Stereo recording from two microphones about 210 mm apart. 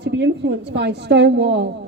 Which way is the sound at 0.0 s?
55° right (ahead or behind).